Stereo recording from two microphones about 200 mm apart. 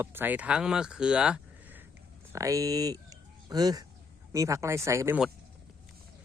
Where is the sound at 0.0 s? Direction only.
10° right (ahead or behind).